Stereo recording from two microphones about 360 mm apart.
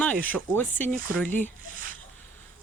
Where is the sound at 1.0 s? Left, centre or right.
Right.